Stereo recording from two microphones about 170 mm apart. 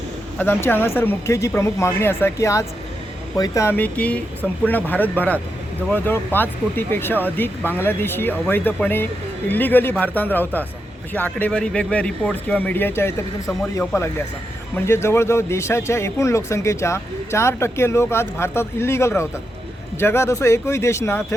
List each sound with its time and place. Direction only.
0.3 s speech: 10° left (ahead or behind)